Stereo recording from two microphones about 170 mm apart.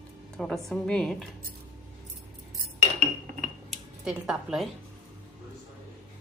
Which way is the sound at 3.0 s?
45° right (ahead or behind).